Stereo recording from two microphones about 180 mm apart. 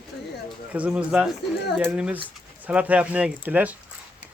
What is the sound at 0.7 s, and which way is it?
A man's voice, 5° right (ahead or behind).